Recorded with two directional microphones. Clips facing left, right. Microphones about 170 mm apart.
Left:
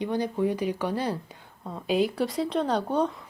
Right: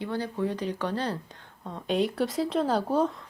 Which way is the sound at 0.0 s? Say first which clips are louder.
Left 4 dB; 15° left (ahead or behind).